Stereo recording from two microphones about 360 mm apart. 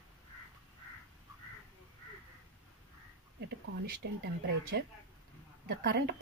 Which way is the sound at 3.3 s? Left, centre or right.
Right.